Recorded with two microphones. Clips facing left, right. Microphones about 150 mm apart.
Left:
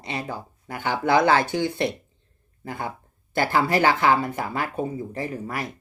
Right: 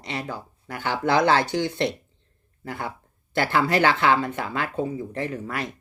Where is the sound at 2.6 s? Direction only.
15° left (ahead or behind).